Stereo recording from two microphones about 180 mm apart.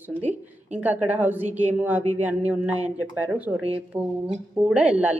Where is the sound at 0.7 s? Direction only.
10° right (ahead or behind).